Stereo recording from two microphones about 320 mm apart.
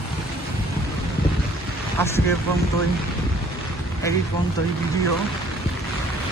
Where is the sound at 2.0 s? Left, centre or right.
Centre.